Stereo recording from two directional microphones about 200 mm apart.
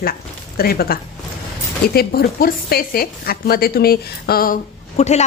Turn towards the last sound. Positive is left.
turn(degrees=35)  # may be behind; listen again after turning